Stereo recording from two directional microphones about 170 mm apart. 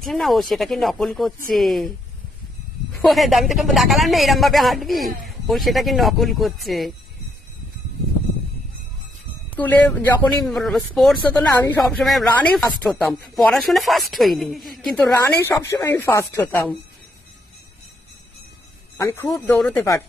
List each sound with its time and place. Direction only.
0.0 s speech: centre (ahead or behind)
2.9 s speech: centre (ahead or behind)
9.6 s speech: 10° left (ahead or behind)
11.4 s speech: 15° left (ahead or behind)
11.8 s speech: centre (ahead or behind)
15.1 s speech: 15° left (ahead or behind)
18.9 s a man's voice: 20° left (ahead or behind)
19.5 s speech: 5° left (ahead or behind)